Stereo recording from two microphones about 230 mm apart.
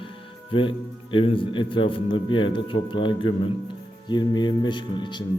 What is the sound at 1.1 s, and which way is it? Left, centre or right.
A man's voice, left.